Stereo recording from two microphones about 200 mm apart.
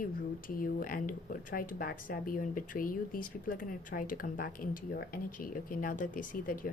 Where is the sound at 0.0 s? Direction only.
45° left (ahead or behind).